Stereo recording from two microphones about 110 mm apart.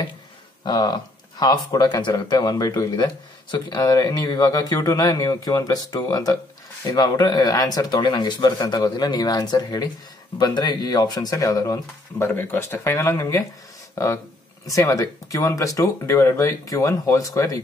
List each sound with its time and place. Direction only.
0.7 s speech: 40° left (ahead or behind)
12.2 s speech: 20° left (ahead or behind)